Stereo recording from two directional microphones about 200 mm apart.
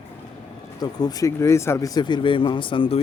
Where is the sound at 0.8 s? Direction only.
20° left (ahead or behind).